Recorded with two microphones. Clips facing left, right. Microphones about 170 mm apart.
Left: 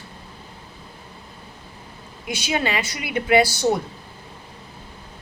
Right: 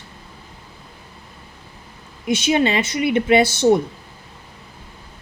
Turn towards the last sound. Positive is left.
turn(degrees=-20)  # may be behind; listen again after turning